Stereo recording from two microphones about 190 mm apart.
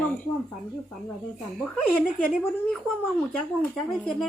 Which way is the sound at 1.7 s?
5° left (ahead or behind).